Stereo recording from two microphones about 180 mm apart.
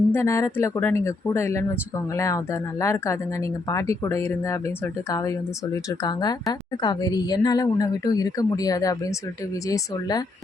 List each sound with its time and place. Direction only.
0.1 s speech: 15° left (ahead or behind)